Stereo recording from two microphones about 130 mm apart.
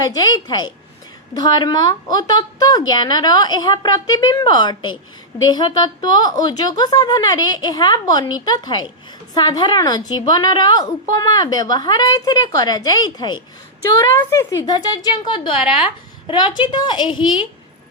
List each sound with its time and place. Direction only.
0.0 s a woman's voice: 30° left (ahead or behind)